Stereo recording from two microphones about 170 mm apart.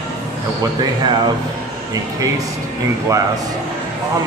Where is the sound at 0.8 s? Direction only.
25° right (ahead or behind).